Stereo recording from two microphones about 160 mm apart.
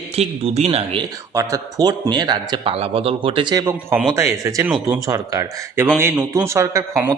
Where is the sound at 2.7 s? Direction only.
35° right (ahead or behind).